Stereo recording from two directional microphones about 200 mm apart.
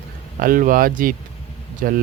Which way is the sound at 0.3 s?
45° right (ahead or behind).